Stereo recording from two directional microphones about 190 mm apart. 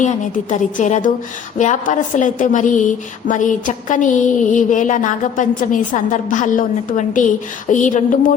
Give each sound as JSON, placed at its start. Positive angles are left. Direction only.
{"t": 0.5, "sound": "a woman's voice", "side_deg": 40}
{"t": 3.2, "sound": "a sound", "side_deg": 45}
{"t": 7.7, "sound": "a woman's voice", "side_deg": 40}